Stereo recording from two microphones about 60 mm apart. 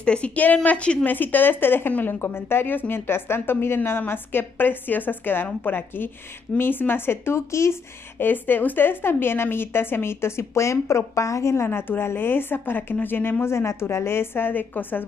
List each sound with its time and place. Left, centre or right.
0.0 s a woman's voice: centre
1.0 s a woman's voice: left
8.2 s a woman's voice: left